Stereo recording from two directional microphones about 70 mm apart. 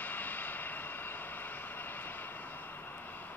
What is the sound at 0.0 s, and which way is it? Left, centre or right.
Vehicle, left.